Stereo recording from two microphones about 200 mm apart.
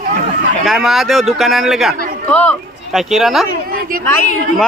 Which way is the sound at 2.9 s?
Centre (ahead or behind).